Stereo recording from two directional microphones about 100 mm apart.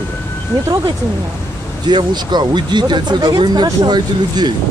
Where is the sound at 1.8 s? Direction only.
45° right (ahead or behind).